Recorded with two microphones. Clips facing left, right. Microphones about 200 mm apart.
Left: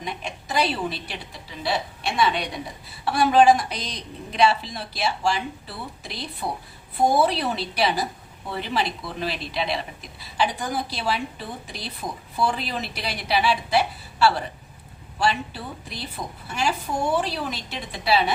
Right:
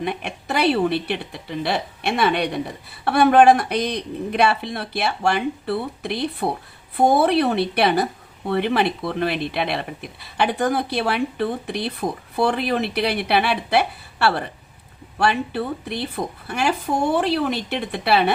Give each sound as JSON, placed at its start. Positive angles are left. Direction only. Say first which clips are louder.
{"t": 0.0, "sound": "a woman's voice", "louder": "right 6 dB", "side_deg": -60}